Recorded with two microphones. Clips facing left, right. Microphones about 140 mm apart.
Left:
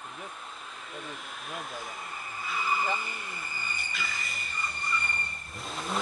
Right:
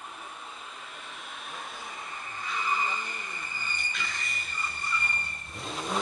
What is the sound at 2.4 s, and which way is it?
Blender, 5° left (ahead or behind).